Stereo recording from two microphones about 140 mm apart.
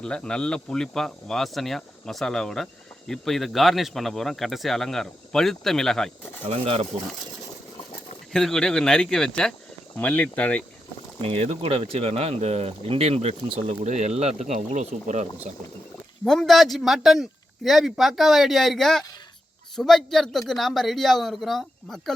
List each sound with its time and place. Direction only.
0.0 s speech: 5° left (ahead or behind)
6.5 s speech: 45° right (ahead or behind)
8.3 s speech: 5° left (ahead or behind)
11.2 s speech: 45° right (ahead or behind); by 15.3 s 60° right (ahead or behind)
16.2 s speech: centre (ahead or behind)